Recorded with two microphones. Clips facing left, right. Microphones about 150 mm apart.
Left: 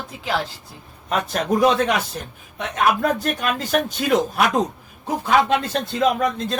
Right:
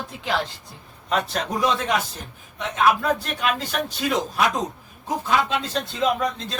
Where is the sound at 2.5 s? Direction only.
55° left (ahead or behind).